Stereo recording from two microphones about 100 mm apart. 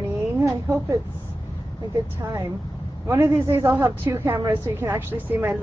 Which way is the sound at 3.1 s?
30° right (ahead or behind).